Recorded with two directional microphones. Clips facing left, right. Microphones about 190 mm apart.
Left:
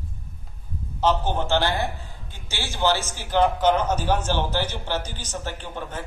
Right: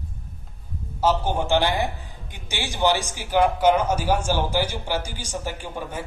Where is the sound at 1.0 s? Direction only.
10° right (ahead or behind).